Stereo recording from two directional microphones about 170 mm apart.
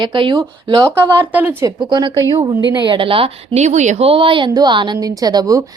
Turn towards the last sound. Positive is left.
turn(degrees=-20)  # may be behind; listen again after turning